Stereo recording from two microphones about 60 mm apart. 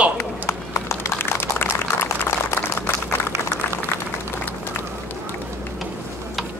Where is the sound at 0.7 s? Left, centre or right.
Left.